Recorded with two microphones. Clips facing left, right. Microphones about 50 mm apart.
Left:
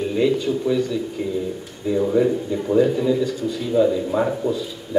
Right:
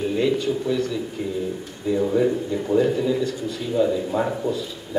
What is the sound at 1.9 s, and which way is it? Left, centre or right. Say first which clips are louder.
A man's voice: left 2 dB; centre.